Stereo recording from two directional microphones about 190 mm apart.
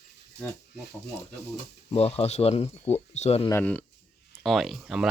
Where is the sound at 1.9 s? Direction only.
35° left (ahead or behind).